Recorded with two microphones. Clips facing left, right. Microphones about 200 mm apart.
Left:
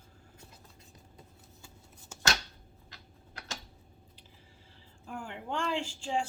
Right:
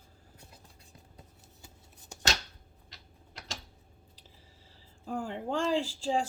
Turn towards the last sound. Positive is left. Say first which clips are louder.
# right 3 dB
turn(degrees=-35)  # may be behind; listen again after turning